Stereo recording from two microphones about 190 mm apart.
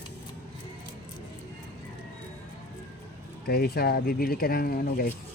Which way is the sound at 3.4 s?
55° left (ahead or behind).